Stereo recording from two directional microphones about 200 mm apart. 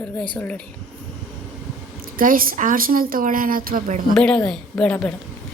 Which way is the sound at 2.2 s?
45° right (ahead or behind).